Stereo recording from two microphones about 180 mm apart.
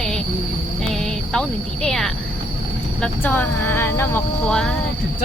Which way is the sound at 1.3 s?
5° left (ahead or behind).